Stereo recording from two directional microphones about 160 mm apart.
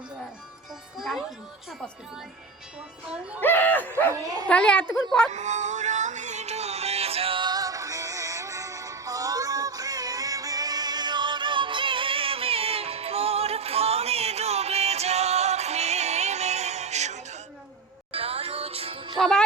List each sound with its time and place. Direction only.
0.9 s music: centre (ahead or behind)
3.4 s speech: 10° left (ahead or behind)
4.1 s speech: 25° right (ahead or behind)
4.4 s speech: 5° left (ahead or behind)
5.3 s music: 45° right (ahead or behind)
19.1 s jingle bell: centre (ahead or behind)